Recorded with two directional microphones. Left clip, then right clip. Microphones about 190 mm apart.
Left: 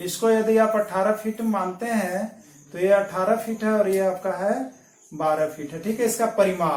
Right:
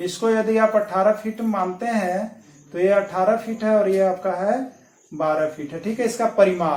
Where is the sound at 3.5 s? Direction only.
10° left (ahead or behind).